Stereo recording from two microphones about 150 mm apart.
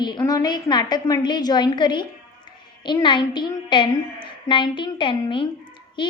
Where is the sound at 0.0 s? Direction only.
25° left (ahead or behind).